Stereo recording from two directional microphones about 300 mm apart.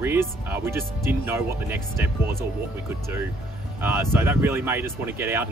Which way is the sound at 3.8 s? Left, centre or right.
Centre.